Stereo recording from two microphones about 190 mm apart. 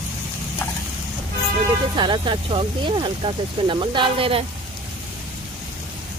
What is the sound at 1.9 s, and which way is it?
Speech, 25° right (ahead or behind).